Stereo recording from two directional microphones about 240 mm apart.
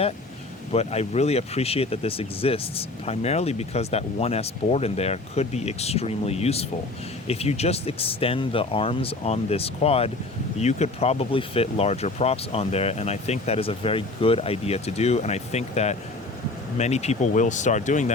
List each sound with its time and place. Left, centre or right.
0.7 s speech: left